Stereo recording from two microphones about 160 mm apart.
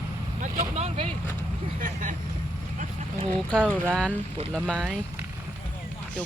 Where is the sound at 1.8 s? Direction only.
55° right (ahead or behind).